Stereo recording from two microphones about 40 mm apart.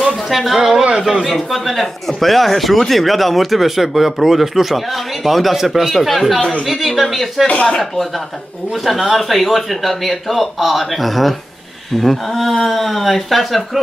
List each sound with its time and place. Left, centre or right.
0.0 s a sound: centre
1.2 s speech: centre
7.4 s speech: left
8.8 s speech: centre